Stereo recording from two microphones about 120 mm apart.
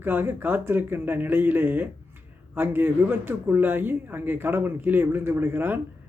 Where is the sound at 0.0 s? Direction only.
15° right (ahead or behind).